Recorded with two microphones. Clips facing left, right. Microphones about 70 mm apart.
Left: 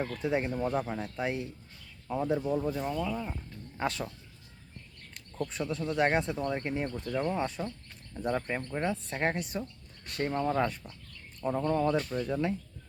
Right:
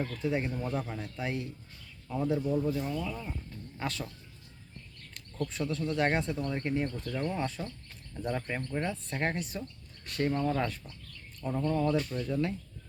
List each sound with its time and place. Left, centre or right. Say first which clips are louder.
0.2 s speech: left 3 dB; centre
5.6 s speech: left 1 dB; centre